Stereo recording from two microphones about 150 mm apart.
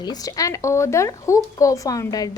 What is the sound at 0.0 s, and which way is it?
Speech, 25° left (ahead or behind).